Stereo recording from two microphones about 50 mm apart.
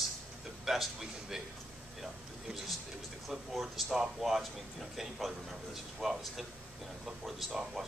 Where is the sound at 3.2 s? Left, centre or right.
Centre.